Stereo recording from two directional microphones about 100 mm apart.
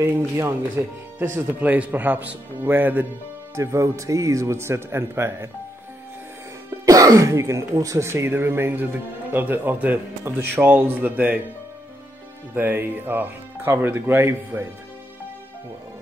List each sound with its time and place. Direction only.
0.0 s speech: 25° right (ahead or behind)
3.5 s speech: 30° right (ahead or behind)
6.9 s speech: 35° right (ahead or behind); by 11.4 s 15° right (ahead or behind)
12.5 s speech: 20° right (ahead or behind)